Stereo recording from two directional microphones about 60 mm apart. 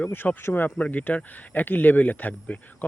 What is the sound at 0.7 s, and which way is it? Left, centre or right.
Speech, left.